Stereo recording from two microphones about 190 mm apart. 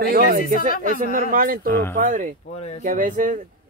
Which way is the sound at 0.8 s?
45° right (ahead or behind).